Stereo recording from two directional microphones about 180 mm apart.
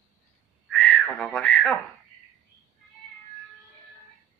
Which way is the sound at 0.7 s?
Centre (ahead or behind).